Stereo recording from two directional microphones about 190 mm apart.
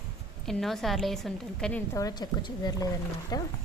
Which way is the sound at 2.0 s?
20° left (ahead or behind).